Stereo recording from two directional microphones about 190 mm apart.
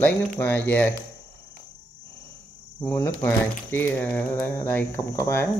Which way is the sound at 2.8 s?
15° left (ahead or behind).